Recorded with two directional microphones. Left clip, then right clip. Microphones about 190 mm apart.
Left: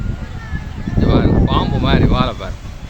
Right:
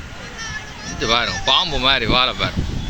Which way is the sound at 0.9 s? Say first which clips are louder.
Left 2 dB; 5° left (ahead or behind).